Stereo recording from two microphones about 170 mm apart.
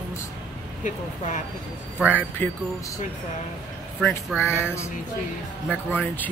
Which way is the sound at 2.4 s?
10° left (ahead or behind).